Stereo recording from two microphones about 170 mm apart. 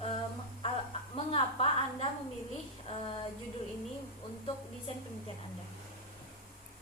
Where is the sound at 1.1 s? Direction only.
35° left (ahead or behind).